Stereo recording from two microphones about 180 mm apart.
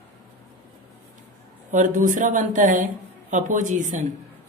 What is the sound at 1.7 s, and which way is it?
Speech, 45° right (ahead or behind).